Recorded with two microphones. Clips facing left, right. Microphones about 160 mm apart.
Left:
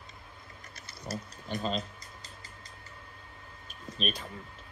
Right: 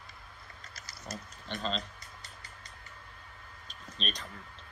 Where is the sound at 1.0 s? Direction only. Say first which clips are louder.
Left 4 dB; 30° left (ahead or behind).